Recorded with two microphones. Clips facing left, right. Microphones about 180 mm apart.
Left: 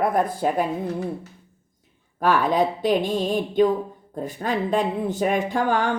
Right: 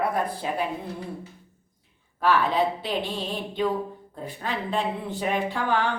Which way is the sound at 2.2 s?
45° left (ahead or behind).